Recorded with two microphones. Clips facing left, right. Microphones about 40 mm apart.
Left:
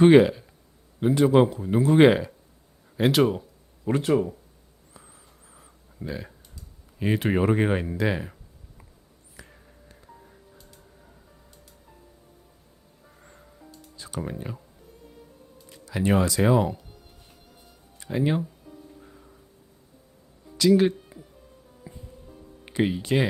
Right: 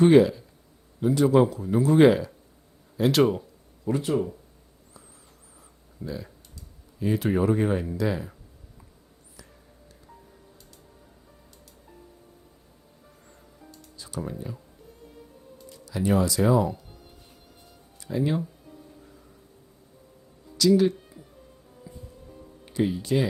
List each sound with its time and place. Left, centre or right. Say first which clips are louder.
0.0 s speech: left 2 dB; left
3.1 s speech: even; centre
3.9 s speech: left 2 dB; left
6.1 s speech: left 1 dB; left
14.0 s clicking: left 3 dB; left
14.5 s speech: left 1 dB; left
15.7 s speech: left 1 dB; left
18.0 s speech: left 1 dB; left
20.6 s speech: left 1 dB; left
21.9 s music: even; left
22.6 s speech: left 1 dB; left